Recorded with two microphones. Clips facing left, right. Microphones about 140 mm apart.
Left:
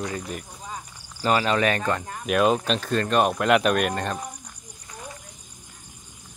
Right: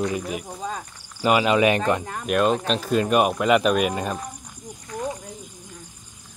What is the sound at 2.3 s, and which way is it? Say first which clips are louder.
Speech: even; centre (ahead or behind).